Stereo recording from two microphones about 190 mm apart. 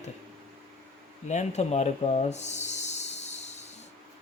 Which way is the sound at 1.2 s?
35° left (ahead or behind).